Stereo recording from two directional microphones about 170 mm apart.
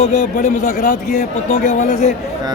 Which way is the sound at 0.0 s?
45° left (ahead or behind).